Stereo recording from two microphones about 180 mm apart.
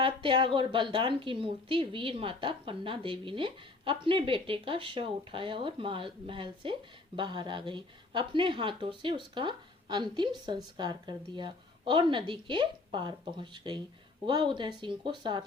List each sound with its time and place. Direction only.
0.0 s a woman's voice: 25° right (ahead or behind)